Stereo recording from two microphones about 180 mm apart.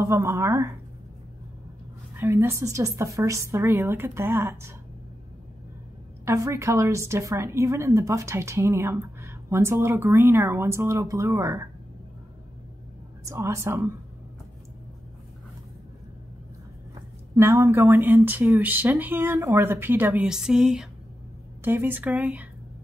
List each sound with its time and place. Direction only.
0.0 s a woman's voice: 15° right (ahead or behind)
2.1 s a woman's voice: 15° right (ahead or behind)
6.2 s a woman's voice: 15° right (ahead or behind)
13.2 s a woman's voice: 15° right (ahead or behind)
17.4 s a woman's voice: 15° right (ahead or behind)